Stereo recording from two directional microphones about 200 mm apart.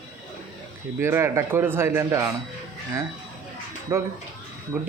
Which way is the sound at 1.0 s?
15° right (ahead or behind).